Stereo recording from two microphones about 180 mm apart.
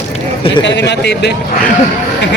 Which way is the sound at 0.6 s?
75° left (ahead or behind).